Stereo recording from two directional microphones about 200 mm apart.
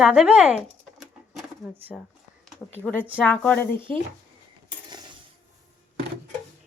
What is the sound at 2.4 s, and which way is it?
Speech, 5° left (ahead or behind).